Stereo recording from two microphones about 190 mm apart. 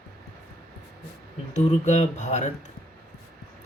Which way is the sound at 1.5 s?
35° left (ahead or behind).